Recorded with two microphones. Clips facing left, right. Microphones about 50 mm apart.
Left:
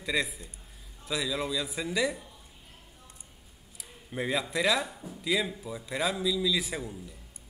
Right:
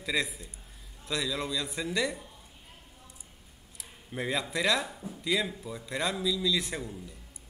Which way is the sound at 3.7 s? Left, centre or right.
Centre.